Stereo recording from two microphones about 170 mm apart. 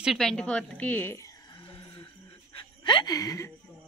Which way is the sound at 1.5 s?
30° left (ahead or behind).